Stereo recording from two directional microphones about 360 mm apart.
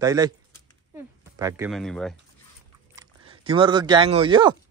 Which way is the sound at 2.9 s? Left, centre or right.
Centre.